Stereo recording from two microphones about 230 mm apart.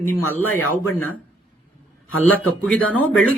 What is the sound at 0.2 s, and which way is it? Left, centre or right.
Speech, left.